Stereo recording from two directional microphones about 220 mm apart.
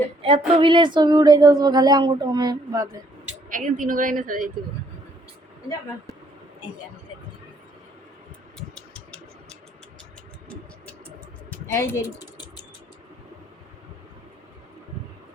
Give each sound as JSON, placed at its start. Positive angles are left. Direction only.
{"t": 0.2, "sound": "speech", "side_deg": -25}
{"t": 3.5, "sound": "a woman's voice", "side_deg": -35}
{"t": 8.5, "sound": "a sound", "side_deg": 5}
{"t": 11.4, "sound": "typing", "side_deg": 10}